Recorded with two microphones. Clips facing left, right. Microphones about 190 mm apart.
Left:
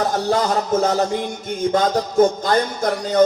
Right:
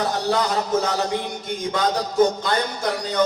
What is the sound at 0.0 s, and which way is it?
A man's voice, 45° left (ahead or behind).